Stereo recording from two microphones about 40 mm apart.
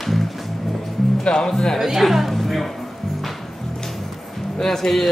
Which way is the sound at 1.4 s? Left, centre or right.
Centre.